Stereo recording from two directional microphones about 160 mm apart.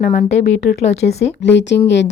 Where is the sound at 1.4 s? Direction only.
90° left.